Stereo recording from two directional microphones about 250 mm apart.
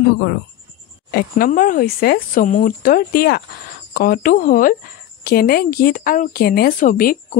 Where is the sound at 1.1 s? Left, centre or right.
Left.